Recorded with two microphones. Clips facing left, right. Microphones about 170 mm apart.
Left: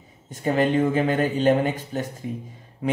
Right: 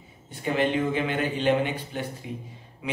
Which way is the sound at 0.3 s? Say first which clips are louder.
Left 4 dB; 45° left (ahead or behind).